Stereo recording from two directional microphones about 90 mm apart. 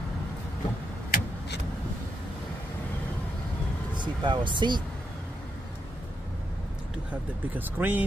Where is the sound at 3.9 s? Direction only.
60° right (ahead or behind).